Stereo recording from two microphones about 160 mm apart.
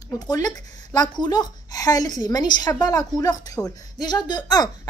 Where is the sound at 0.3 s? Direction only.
25° left (ahead or behind).